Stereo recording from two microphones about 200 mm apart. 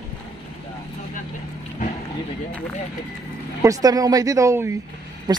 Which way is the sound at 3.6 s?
20° right (ahead or behind).